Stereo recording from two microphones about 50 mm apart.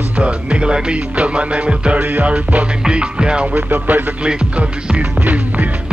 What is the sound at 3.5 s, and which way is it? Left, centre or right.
Music, right.